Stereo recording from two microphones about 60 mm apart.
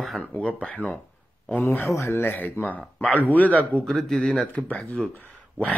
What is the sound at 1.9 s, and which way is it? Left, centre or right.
Speech, left.